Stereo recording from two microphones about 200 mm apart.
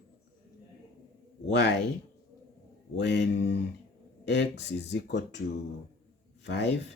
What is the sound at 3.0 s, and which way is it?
Speech, 60° left (ahead or behind).